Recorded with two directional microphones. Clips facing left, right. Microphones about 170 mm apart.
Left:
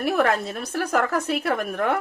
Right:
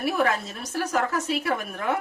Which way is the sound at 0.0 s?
60° left (ahead or behind).